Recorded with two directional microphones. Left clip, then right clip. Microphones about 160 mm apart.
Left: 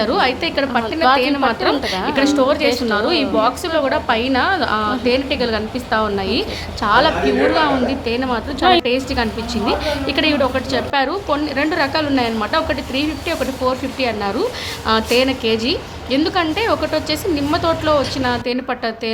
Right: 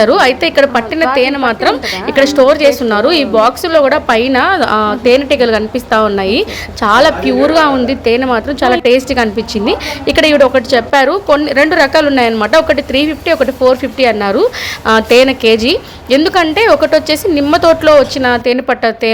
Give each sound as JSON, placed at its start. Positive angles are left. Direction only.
{"t": 0.0, "sound": "a woman's voice", "side_deg": -45}